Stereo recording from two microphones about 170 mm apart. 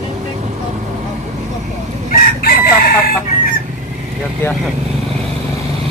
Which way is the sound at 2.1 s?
60° left (ahead or behind).